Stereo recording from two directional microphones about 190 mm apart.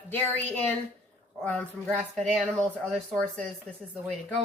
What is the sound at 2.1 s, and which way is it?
Speech, centre (ahead or behind).